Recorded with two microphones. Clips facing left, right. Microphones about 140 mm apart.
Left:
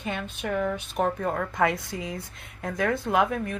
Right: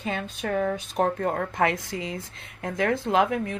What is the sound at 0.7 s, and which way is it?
A woman's voice, 35° right (ahead or behind).